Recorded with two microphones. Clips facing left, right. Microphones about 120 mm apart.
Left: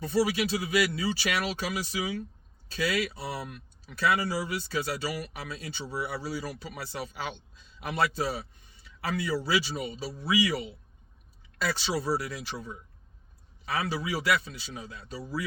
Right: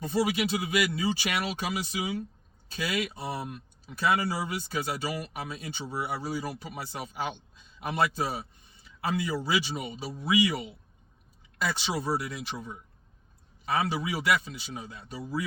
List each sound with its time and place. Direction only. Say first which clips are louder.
0.0 s speech: left 1 dB; 20° right (ahead or behind)